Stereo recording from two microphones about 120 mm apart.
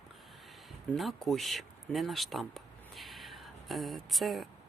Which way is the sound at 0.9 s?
Centre (ahead or behind).